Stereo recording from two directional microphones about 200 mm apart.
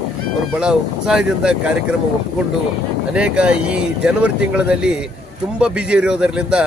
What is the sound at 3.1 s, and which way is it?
Speech, 5° right (ahead or behind).